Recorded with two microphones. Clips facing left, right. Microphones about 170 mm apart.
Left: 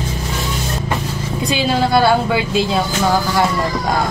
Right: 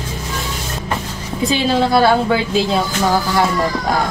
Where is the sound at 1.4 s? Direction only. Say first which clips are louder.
Right 2 dB; centre (ahead or behind).